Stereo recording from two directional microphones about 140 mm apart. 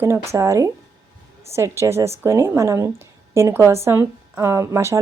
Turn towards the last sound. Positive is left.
turn(degrees=-20)  # may be behind; listen again after turning